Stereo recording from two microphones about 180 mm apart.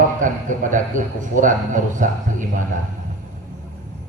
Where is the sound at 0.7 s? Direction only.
45° right (ahead or behind).